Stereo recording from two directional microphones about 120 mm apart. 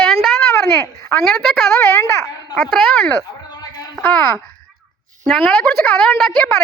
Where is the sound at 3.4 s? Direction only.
35° left (ahead or behind).